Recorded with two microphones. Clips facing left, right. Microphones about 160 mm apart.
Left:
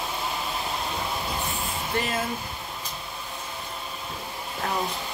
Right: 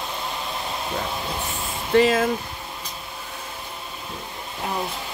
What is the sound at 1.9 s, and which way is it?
Speech, 90° right.